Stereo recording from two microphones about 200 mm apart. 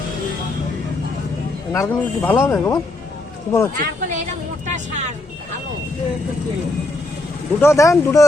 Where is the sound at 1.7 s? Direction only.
10° left (ahead or behind).